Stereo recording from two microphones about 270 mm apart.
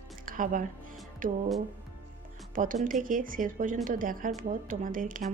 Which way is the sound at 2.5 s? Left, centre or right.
Right.